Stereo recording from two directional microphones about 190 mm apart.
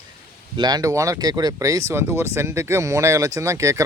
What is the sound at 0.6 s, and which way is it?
Speech, 20° right (ahead or behind).